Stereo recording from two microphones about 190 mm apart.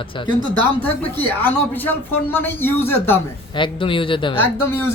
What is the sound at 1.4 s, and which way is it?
A man's voice, 10° left (ahead or behind).